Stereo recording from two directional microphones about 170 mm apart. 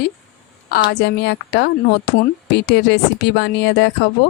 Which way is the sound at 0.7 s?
70° left (ahead or behind).